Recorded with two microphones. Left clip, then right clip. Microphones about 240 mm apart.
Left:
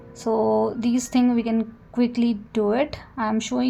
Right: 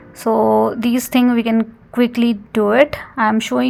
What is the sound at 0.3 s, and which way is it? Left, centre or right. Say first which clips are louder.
A woman's voice: right 7 dB; right.